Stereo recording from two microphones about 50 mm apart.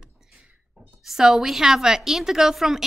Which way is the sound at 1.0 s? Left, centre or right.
Centre.